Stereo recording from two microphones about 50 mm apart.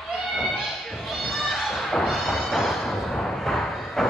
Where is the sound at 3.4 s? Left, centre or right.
Centre.